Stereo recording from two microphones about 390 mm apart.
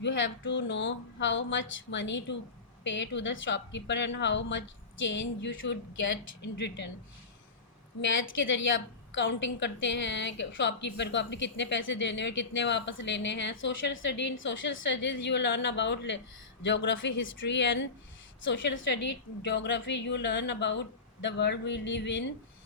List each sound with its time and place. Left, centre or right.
0.0 s speech: left
8.0 s speech: left